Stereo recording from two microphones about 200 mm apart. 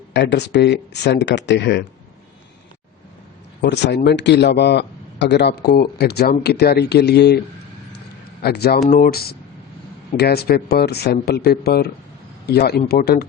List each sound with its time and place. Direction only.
0.1 s speech: 60° left (ahead or behind)
3.6 s speech: 60° left (ahead or behind)